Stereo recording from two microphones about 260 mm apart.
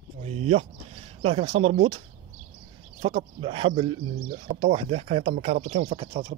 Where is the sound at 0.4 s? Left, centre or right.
Right.